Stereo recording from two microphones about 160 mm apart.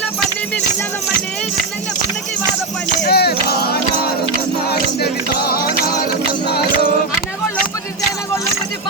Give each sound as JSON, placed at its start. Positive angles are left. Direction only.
{"t": 3.0, "sound": "music", "side_deg": 80}
{"t": 4.9, "sound": "music", "side_deg": 75}